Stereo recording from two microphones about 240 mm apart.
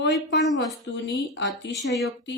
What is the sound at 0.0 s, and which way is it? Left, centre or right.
Speech, left.